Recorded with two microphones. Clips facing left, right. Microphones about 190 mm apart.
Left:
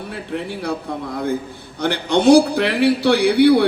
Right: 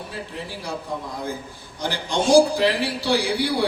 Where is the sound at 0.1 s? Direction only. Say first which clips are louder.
Left 7 dB; 60° left (ahead or behind).